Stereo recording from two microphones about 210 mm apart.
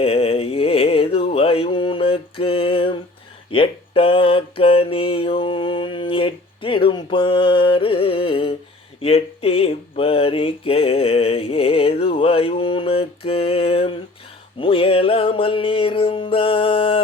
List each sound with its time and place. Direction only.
0.0 s music: 30° left (ahead or behind)
3.5 s mantra: 25° left (ahead or behind)
14.6 s music: 25° left (ahead or behind)